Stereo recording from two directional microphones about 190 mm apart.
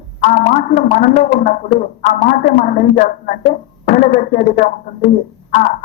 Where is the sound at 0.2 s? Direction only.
40° left (ahead or behind).